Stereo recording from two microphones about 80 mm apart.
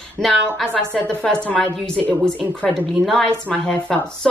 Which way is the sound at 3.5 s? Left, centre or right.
Centre.